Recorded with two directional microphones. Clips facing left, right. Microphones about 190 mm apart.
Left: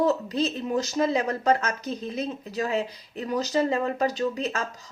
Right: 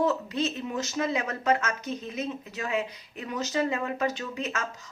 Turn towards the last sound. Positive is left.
turn(degrees=35)  # may be behind; listen again after turning